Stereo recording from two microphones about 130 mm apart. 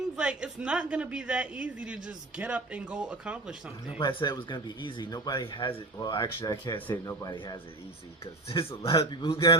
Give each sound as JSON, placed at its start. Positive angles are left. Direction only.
{"t": 0.2, "sound": "a woman's voice", "side_deg": -5}
{"t": 3.9, "sound": "speech", "side_deg": 35}
{"t": 6.8, "sound": "speech", "side_deg": 15}
{"t": 7.3, "sound": "speech", "side_deg": 35}
{"t": 8.2, "sound": "a man's voice", "side_deg": 45}